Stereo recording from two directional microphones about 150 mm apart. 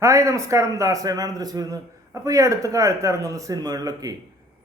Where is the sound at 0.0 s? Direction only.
20° right (ahead or behind).